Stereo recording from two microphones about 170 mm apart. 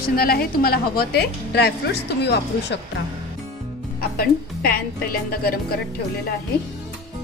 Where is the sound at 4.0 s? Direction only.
65° left (ahead or behind).